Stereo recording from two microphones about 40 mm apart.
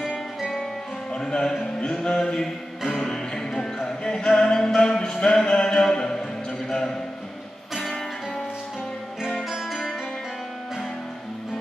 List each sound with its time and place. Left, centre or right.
1.1 s music: centre
2.1 s mantra: centre
2.9 s music: centre
6.7 s a sound: centre